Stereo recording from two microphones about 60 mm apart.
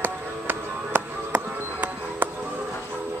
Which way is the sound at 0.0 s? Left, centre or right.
Right.